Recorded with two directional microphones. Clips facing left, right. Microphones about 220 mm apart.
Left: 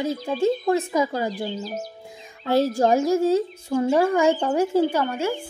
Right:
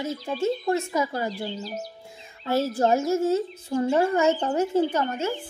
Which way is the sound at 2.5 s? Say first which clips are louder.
Left 3 dB; 15° left (ahead or behind).